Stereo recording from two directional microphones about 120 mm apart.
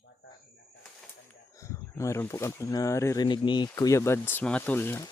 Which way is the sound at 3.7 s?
25° left (ahead or behind).